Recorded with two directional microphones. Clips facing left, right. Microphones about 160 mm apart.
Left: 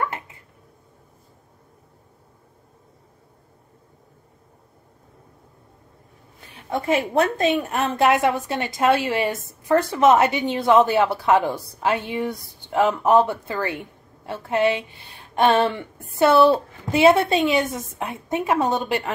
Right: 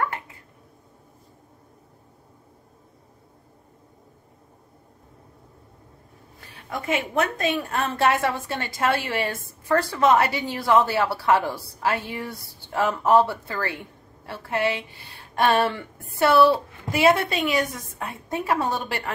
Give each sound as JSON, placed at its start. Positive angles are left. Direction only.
{"t": 6.9, "sound": "a woman's voice", "side_deg": 35}